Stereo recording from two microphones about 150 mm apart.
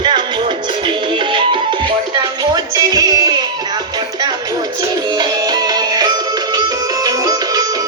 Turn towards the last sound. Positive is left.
turn(degrees=-25)  # may be behind; listen again after turning